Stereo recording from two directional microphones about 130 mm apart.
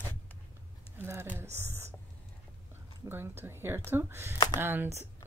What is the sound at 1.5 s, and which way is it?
Whispering, 20° right (ahead or behind).